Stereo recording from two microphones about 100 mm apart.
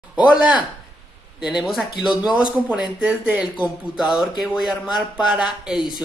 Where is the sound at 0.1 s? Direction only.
10° right (ahead or behind).